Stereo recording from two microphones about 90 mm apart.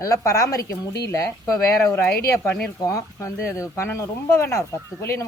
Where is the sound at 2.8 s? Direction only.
35° left (ahead or behind).